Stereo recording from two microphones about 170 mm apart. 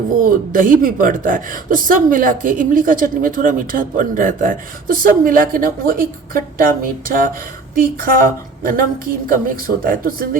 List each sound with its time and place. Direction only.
0.2 s speech: 55° right (ahead or behind)